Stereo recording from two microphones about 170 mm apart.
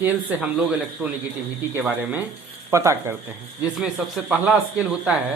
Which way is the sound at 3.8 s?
Centre (ahead or behind).